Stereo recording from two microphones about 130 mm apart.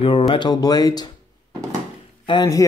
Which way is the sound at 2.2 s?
35° left (ahead or behind).